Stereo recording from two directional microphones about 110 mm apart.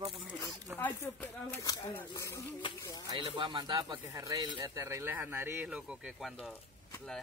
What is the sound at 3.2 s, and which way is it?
Speech, 45° right (ahead or behind).